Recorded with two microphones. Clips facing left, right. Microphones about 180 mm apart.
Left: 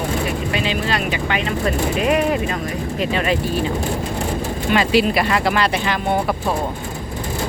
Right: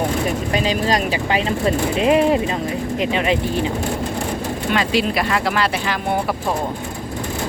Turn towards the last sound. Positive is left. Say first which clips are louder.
# left 1 dB
turn(degrees=0)  # may be behind; listen again after turning